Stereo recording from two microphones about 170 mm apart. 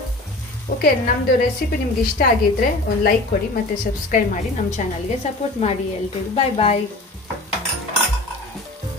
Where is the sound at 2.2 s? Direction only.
60° left (ahead or behind).